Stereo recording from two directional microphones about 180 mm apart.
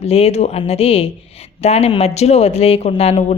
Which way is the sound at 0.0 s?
35° left (ahead or behind).